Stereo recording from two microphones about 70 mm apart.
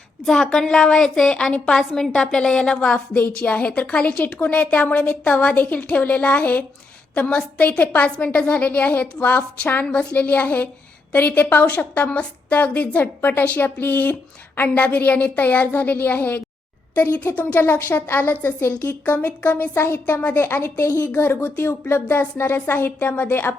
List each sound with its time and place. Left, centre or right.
0.3 s a woman's voice: centre
3.2 s a woman's voice: left
19.1 s a woman's voice: left